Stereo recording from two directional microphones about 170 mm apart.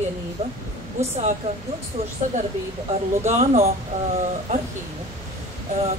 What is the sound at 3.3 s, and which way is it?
Speech, 40° right (ahead or behind).